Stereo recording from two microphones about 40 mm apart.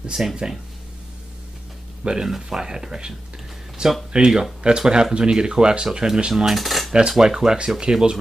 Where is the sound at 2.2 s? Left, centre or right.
Centre.